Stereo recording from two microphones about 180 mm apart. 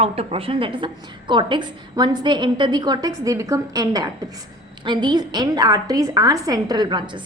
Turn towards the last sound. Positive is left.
turn(degrees=-25)  # may be behind; listen again after turning